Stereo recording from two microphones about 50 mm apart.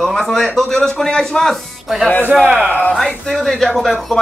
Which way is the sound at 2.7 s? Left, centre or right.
Left.